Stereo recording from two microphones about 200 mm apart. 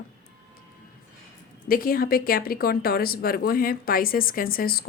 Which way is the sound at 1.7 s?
45° left (ahead or behind).